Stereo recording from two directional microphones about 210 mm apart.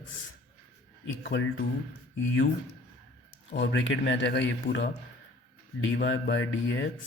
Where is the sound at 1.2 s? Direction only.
50° left (ahead or behind).